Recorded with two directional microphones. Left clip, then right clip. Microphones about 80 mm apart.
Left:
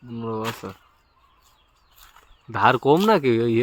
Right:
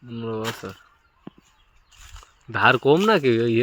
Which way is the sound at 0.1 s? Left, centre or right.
Left.